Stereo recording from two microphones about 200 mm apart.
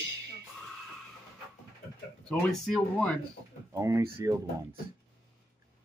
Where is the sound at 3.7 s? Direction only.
15° right (ahead or behind).